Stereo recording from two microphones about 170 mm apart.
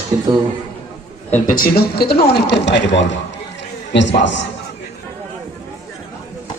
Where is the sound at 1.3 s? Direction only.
55° left (ahead or behind); by 3.1 s 90° left.